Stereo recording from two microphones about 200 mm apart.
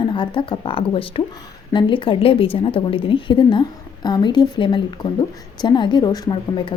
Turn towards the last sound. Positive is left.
turn(degrees=25)  # may be behind; listen again after turning